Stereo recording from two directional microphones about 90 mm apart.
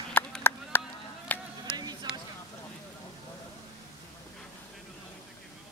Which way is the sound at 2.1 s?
10° right (ahead or behind).